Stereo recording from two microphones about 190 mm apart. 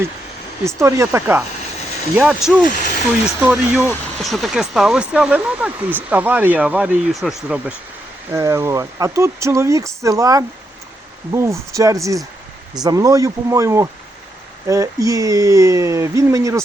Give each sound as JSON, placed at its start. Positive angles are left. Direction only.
{"t": 0.8, "sound": "speech", "side_deg": -15}